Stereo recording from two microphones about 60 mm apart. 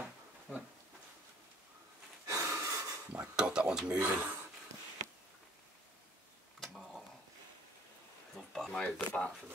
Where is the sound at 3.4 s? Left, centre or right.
Centre.